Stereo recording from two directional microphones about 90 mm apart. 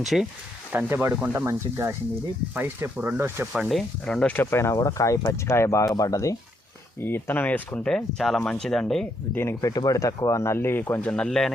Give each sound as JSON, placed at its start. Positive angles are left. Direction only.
{"t": 0.0, "sound": "speech", "side_deg": 0}
{"t": 0.7, "sound": "speech", "side_deg": -20}
{"t": 1.5, "sound": "speech", "side_deg": -30}
{"t": 3.5, "sound": "speech", "side_deg": 0}
{"t": 4.4, "sound": "speech", "side_deg": 30}
{"t": 5.8, "sound": "speech", "side_deg": 40}
{"t": 7.0, "sound": "speech", "side_deg": 25}
{"t": 7.9, "sound": "speech", "side_deg": 5}
{"t": 9.3, "sound": "speech", "side_deg": 25}
{"t": 9.6, "sound": "speech", "side_deg": 40}
{"t": 11.1, "sound": "speech", "side_deg": 5}